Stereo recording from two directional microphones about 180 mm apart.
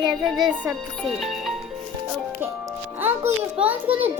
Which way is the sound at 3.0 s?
10° right (ahead or behind).